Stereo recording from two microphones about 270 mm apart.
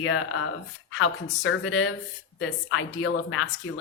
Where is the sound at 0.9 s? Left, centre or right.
Left.